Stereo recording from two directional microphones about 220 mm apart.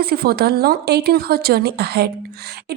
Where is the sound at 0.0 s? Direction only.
45° right (ahead or behind).